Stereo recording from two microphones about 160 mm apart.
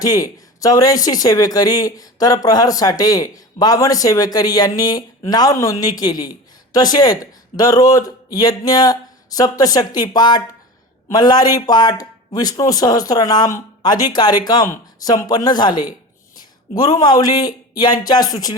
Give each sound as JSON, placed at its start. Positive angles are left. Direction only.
{"t": 0.0, "sound": "speech", "side_deg": 20}